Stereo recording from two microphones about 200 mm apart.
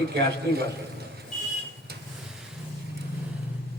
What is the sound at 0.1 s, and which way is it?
Speech, 55° right (ahead or behind).